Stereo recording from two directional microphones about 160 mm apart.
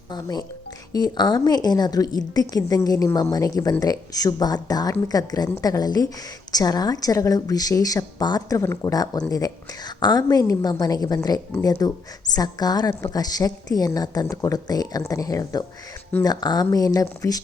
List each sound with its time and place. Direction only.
0.1 s a woman's voice: 25° left (ahead or behind)